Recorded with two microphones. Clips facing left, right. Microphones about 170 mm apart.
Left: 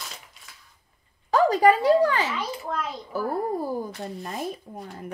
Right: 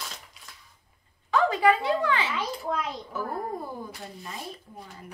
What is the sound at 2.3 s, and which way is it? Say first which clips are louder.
Speech: even; centre (ahead or behind).